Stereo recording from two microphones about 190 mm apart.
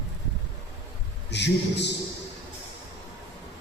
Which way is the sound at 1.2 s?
65° left (ahead or behind).